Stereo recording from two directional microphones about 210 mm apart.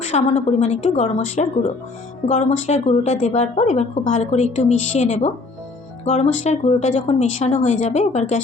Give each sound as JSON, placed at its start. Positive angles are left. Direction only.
{"t": 0.1, "sound": "speech", "side_deg": 35}